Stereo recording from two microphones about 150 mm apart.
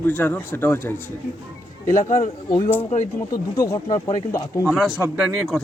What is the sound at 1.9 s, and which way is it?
Speech, 55° left (ahead or behind).